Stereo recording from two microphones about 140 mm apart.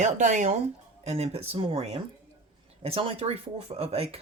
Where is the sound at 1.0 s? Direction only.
45° right (ahead or behind).